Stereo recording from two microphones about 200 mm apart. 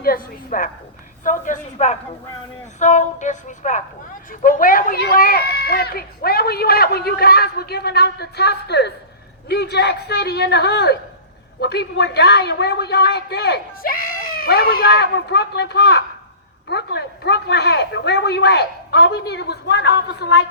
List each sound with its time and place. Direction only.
0.0 s a woman's voice: 45° left (ahead or behind)